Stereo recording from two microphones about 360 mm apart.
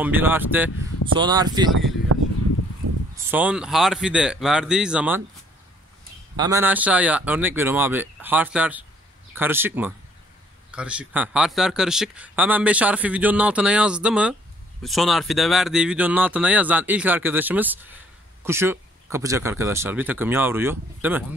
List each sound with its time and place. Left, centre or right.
0.0 s speech: centre
2.1 s a sound: right
3.3 s speech: centre
6.3 s speech: centre